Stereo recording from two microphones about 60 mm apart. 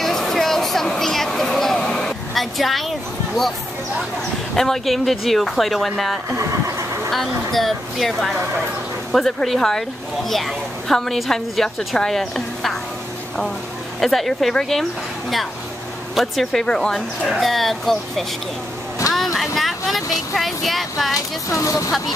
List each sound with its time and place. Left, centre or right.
0.0 s a sound: centre
4.6 s speech: centre
13.9 s speech: centre
21.5 s speech: left